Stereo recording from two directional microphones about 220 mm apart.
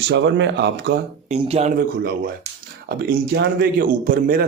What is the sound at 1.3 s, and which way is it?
Speech, 30° right (ahead or behind).